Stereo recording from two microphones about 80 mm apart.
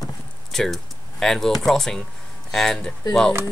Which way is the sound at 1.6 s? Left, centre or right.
Centre.